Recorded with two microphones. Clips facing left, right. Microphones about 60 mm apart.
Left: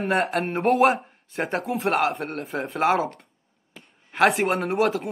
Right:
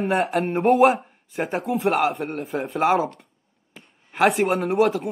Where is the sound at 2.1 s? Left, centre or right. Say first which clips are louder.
Right 2 dB; centre.